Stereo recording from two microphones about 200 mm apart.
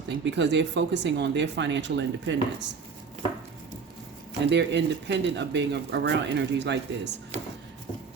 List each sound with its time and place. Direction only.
0.1 s speech: 60° right (ahead or behind)
4.4 s speech: 60° right (ahead or behind)